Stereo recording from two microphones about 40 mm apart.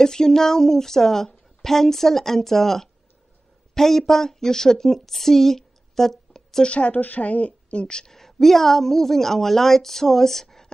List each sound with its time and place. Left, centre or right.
0.0 s a woman's voice: centre
6.6 s a woman's voice: left
8.1 s a woman's voice: centre